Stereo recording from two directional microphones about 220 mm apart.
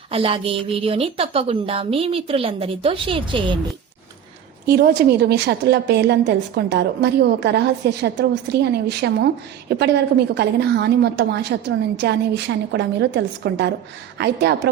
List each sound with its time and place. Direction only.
0.1 s a woman's voice: 25° right (ahead or behind)
4.6 s a woman's voice: 45° right (ahead or behind)